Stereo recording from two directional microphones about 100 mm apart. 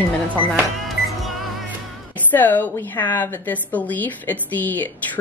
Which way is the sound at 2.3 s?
20° left (ahead or behind).